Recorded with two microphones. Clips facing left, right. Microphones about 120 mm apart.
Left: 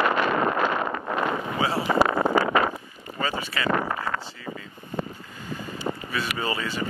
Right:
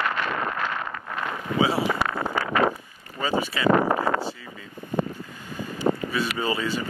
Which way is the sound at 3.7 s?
35° right (ahead or behind).